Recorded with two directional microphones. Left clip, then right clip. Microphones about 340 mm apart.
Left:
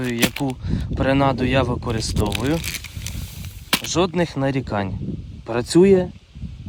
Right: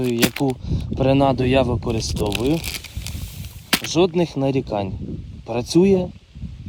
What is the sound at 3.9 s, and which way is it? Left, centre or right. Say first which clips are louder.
Speech: right 3 dB; centre.